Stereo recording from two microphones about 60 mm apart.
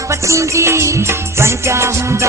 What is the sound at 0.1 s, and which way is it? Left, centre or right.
Music, right.